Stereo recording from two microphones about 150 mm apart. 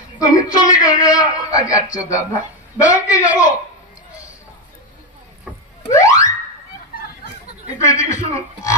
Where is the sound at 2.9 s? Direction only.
20° left (ahead or behind).